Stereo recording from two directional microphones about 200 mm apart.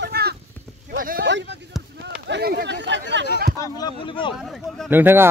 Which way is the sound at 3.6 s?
20° left (ahead or behind).